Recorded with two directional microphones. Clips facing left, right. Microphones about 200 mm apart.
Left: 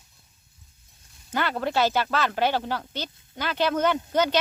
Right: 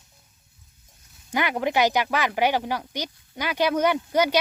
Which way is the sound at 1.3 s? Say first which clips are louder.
Right 2 dB; 15° right (ahead or behind).